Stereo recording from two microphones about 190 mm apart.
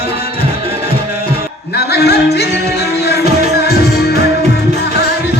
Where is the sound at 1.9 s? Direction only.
60° left (ahead or behind).